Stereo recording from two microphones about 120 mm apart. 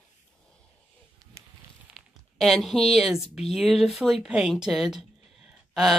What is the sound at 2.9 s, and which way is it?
Speech, centre (ahead or behind).